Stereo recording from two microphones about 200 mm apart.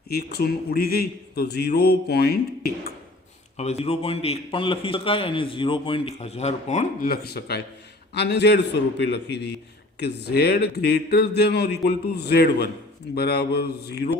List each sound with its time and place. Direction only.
0.1 s a man's voice: 55° left (ahead or behind)
3.6 s a man's voice: 35° left (ahead or behind); by 14.1 s 55° left (ahead or behind)